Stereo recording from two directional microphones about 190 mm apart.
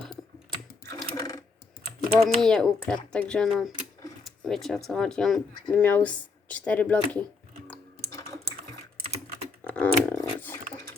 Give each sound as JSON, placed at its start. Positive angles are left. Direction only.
{"t": 1.2, "sound": "typing", "side_deg": 15}
{"t": 2.1, "sound": "speech", "side_deg": 5}
{"t": 9.6, "sound": "dog", "side_deg": 10}